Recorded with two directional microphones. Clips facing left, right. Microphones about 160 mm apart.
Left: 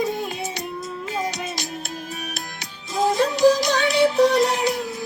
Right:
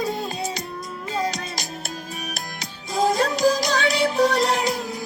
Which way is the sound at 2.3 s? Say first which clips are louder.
Right 1 dB; 40° right (ahead or behind).